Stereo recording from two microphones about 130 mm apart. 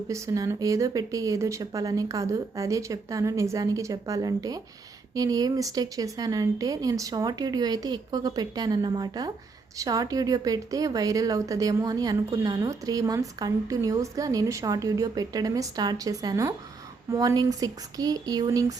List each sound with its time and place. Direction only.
0.1 s a woman's voice: 25° right (ahead or behind)